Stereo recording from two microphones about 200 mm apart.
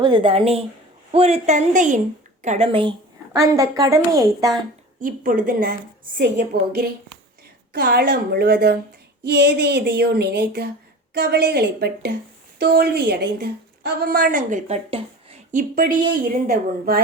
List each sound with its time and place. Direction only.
0.0 s a woman's voice: 25° right (ahead or behind)
3.3 s a woman's voice: 15° right (ahead or behind)
4.9 s a woman's voice: 45° right (ahead or behind)
6.1 s female singing: 60° right (ahead or behind)
7.7 s a woman's voice: 50° right (ahead or behind)
9.2 s female singing: 55° right (ahead or behind)
11.1 s a woman's voice: 55° right (ahead or behind); by 15.6 s 30° right (ahead or behind)
15.7 s a woman's voice: 45° right (ahead or behind)